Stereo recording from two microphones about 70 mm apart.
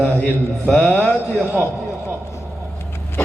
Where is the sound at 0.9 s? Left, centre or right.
Right.